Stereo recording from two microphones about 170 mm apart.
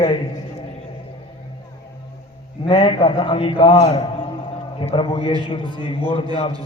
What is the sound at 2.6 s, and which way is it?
A man's voice, 30° left (ahead or behind).